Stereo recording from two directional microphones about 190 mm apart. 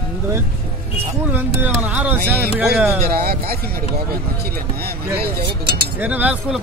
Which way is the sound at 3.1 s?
50° right (ahead or behind).